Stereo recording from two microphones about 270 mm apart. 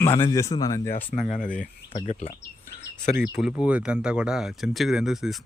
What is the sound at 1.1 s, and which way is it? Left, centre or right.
Speech, left.